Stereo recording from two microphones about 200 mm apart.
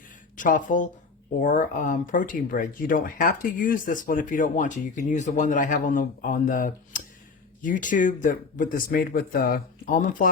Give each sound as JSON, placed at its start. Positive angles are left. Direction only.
{"t": 0.3, "sound": "speech", "side_deg": 40}